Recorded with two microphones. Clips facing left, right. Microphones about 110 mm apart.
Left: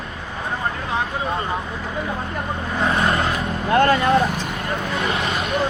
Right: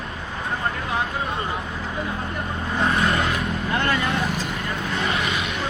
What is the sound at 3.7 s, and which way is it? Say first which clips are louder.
Speech: left 9 dB; 60° left (ahead or behind).